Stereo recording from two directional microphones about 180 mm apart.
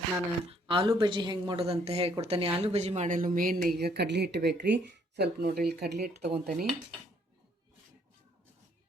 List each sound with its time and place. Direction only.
0.5 s a woman's voice: 30° right (ahead or behind); by 3.6 s 50° right (ahead or behind)
3.7 s speech: 60° right (ahead or behind)